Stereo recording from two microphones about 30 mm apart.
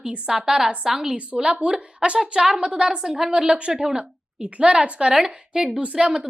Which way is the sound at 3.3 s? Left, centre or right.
Right.